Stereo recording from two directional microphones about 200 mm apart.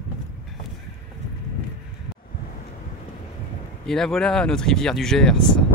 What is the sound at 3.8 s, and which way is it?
Speech, centre (ahead or behind).